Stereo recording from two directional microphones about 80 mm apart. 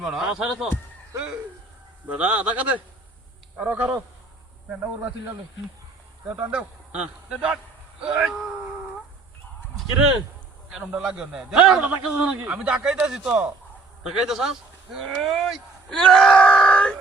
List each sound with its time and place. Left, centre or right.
0.0 s speech: centre
2.0 s speech: centre
6.5 s speech: centre
10.7 s speech: centre
15.0 s speech: centre
15.9 s wail: centre